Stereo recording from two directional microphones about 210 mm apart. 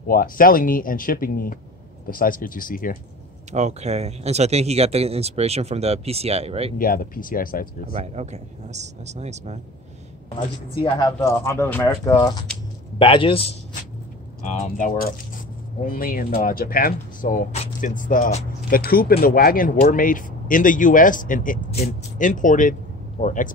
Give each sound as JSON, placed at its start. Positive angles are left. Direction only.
{"t": 0.0, "sound": "speech", "side_deg": 45}
{"t": 3.5, "sound": "speech", "side_deg": -30}
{"t": 6.8, "sound": "speech", "side_deg": 45}
{"t": 7.9, "sound": "speech", "side_deg": -30}
{"t": 10.7, "sound": "a man's voice", "side_deg": 20}
{"t": 14.4, "sound": "speech", "side_deg": 35}